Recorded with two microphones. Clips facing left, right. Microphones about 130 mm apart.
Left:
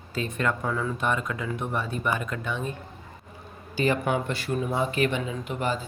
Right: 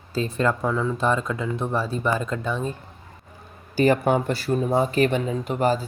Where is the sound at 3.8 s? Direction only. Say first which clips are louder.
Right 6 dB; 45° right (ahead or behind).